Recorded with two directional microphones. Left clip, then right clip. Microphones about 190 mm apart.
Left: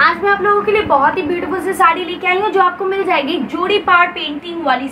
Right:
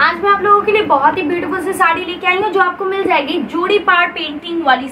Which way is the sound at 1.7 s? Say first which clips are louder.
Left 2 dB; 5° right (ahead or behind).